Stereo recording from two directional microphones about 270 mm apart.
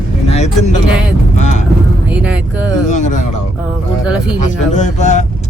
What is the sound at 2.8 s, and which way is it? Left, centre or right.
Speech, left.